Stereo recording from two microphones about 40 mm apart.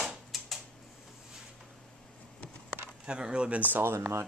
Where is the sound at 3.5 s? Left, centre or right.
Right.